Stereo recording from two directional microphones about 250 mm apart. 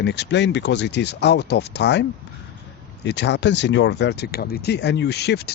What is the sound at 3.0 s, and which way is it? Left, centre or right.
Speech, left.